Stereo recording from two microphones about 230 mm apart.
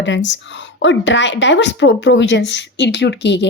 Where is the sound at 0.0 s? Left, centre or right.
Left.